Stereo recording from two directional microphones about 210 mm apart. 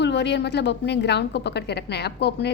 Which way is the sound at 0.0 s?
55° left (ahead or behind).